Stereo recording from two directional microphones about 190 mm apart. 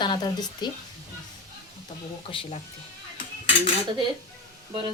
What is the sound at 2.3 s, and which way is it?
Speech, 25° left (ahead or behind).